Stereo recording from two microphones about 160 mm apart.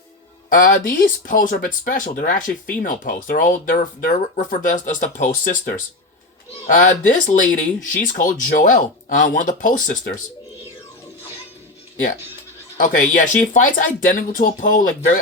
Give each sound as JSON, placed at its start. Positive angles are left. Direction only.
{"t": 0.9, "sound": "speech", "side_deg": 60}
{"t": 12.7, "sound": "speech", "side_deg": 55}